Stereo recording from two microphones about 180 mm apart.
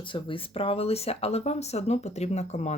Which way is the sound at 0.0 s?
30° left (ahead or behind).